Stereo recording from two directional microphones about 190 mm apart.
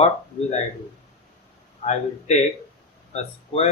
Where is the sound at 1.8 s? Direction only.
35° left (ahead or behind).